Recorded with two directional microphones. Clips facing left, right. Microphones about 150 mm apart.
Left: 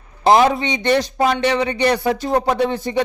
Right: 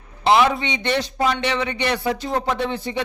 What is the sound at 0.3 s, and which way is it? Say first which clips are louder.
Speech: left 3 dB; 40° left (ahead or behind).